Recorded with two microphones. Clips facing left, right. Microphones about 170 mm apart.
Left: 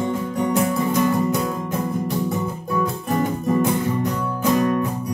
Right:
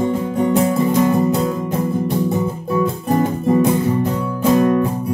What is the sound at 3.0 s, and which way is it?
Guitar, 30° right (ahead or behind).